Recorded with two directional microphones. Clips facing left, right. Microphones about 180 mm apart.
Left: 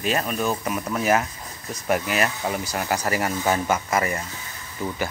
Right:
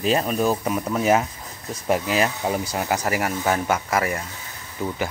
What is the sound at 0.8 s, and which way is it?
Speech, 20° right (ahead or behind).